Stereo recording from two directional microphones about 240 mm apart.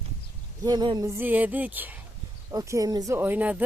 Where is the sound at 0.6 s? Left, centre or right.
Centre.